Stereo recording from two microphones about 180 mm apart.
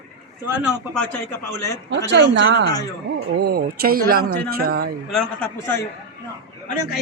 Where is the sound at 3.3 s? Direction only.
60° right (ahead or behind).